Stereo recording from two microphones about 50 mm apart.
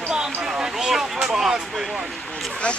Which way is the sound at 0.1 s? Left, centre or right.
Centre.